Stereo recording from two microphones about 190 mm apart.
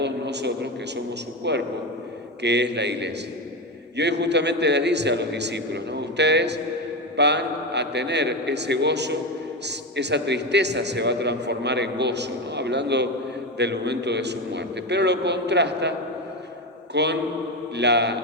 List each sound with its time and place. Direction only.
0.0 s a woman's voice: 65° right (ahead or behind)